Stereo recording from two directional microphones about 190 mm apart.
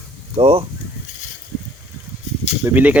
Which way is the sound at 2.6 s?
10° right (ahead or behind).